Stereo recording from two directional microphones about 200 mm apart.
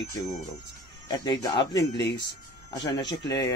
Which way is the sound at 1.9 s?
60° left (ahead or behind).